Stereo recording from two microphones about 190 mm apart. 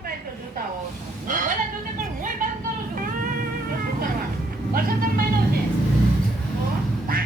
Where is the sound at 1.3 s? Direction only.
40° right (ahead or behind).